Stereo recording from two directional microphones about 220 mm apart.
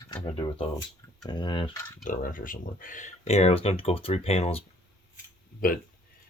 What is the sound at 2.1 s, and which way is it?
Speech, 40° left (ahead or behind).